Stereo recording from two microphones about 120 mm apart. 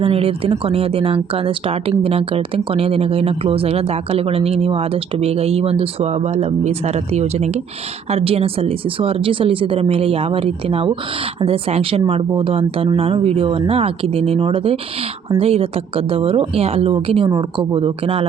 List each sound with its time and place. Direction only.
0.0 s speech: 50° right (ahead or behind)
8.1 s speech: 55° right (ahead or behind)
17.2 s speech: 35° right (ahead or behind); by 18.3 s 50° right (ahead or behind)